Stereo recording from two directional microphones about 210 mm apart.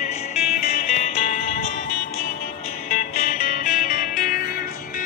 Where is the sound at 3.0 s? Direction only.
35° left (ahead or behind).